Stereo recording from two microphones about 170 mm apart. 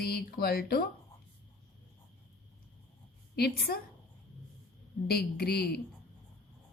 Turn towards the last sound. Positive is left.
turn(degrees=70)  # may be behind; listen again after turning